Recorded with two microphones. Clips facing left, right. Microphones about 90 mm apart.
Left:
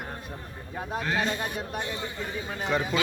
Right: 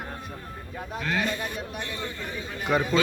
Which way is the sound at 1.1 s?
20° left (ahead or behind).